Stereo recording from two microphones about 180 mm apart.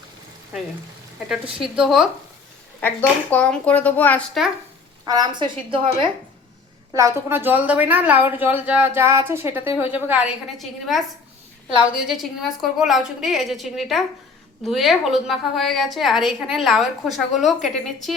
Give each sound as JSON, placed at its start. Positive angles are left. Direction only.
{"t": 1.5, "sound": "a woman's voice", "side_deg": -5}
{"t": 2.8, "sound": "speech", "side_deg": 10}
{"t": 5.0, "sound": "a woman's voice", "side_deg": -20}
{"t": 6.9, "sound": "a woman's voice", "side_deg": -15}
{"t": 12.2, "sound": "a woman's voice", "side_deg": 0}